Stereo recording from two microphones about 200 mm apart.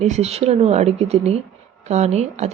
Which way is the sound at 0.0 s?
35° right (ahead or behind).